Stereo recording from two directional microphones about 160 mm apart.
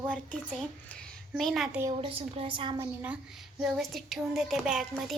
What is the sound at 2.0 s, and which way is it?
Speech, 35° right (ahead or behind).